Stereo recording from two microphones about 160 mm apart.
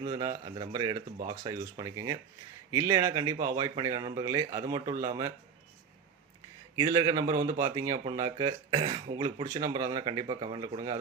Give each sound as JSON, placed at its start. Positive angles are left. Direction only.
{"t": 0.1, "sound": "speech", "side_deg": -30}
{"t": 6.7, "sound": "speech", "side_deg": -30}